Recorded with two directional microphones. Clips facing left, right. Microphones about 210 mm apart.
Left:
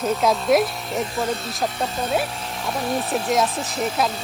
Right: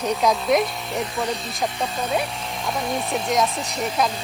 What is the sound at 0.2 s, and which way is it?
Speech, centre (ahead or behind).